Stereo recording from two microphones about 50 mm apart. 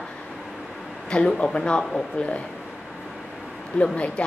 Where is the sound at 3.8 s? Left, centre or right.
Left.